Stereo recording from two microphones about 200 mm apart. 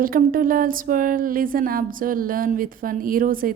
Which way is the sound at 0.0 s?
45° right (ahead or behind).